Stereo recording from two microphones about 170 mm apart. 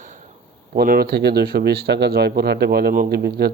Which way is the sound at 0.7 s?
65° right (ahead or behind).